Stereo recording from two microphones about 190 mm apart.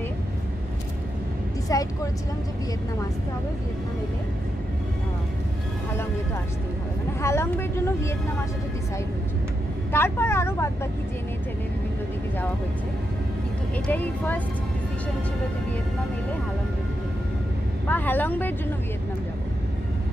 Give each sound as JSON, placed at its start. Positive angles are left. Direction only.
{"t": 1.7, "sound": "speech", "side_deg": 20}
{"t": 7.2, "sound": "speech", "side_deg": 15}
{"t": 9.9, "sound": "speech", "side_deg": 10}
{"t": 13.8, "sound": "speech", "side_deg": 10}
{"t": 17.8, "sound": "speech", "side_deg": 10}